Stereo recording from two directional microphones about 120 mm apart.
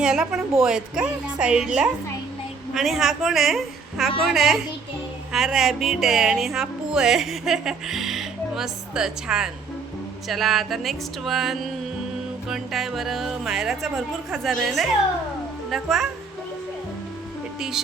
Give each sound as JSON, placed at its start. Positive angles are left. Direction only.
{"t": 0.0, "sound": "music", "side_deg": -5}
{"t": 0.6, "sound": "a woman's voice", "side_deg": -5}
{"t": 2.7, "sound": "music", "side_deg": 0}
{"t": 17.6, "sound": "music", "side_deg": -5}